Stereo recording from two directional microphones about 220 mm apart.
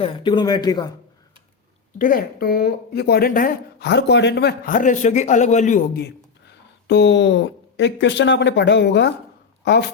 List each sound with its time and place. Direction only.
0.0 s speech: 20° left (ahead or behind)
2.0 s speech: 40° left (ahead or behind)
6.5 s speech: 50° left (ahead or behind)